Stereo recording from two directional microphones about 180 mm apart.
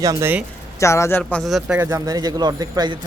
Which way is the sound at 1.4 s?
Centre (ahead or behind).